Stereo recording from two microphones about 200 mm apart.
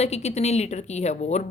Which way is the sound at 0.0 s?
35° left (ahead or behind).